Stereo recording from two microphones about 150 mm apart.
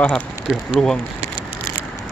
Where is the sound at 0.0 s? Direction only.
5° left (ahead or behind).